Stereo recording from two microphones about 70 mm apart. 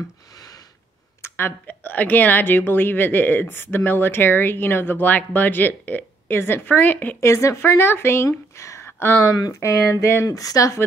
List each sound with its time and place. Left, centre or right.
0.3 s a sound: left
1.2 s speech: left
7.2 s speech: left